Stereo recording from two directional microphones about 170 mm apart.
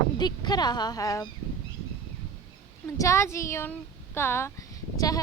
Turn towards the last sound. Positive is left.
turn(degrees=20)  # may be behind; listen again after turning